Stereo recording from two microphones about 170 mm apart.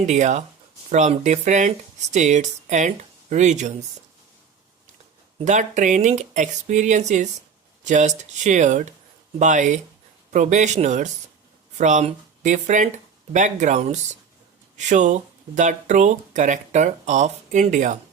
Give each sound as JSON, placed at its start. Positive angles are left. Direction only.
{"t": 0.0, "sound": "speech", "side_deg": -45}
{"t": 5.5, "sound": "speech", "side_deg": -45}